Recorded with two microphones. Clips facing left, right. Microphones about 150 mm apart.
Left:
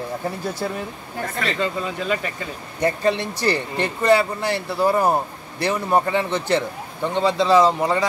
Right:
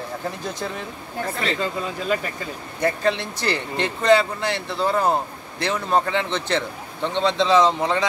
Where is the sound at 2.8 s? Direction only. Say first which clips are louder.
Left 2 dB; 15° left (ahead or behind).